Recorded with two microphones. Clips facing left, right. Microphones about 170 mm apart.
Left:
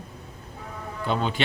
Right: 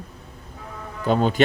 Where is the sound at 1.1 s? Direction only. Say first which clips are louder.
Right 7 dB; 40° right (ahead or behind).